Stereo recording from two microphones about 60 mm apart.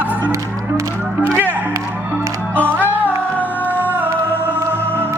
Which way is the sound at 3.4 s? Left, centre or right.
Left.